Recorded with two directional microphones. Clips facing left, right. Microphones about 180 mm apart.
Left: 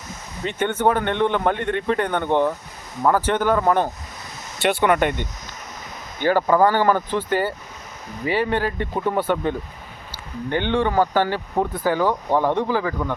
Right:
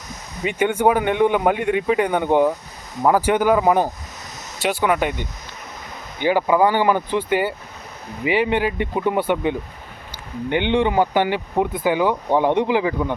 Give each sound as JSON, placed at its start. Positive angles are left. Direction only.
{"t": 0.4, "sound": "a man's voice", "side_deg": -10}